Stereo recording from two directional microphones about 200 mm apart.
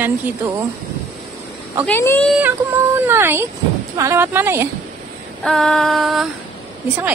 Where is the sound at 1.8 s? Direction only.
10° left (ahead or behind).